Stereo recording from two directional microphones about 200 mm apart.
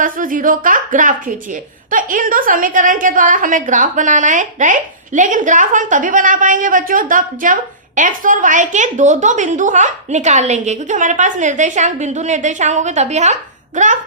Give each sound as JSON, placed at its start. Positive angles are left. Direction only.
{"t": 0.0, "sound": "a woman's voice", "side_deg": -40}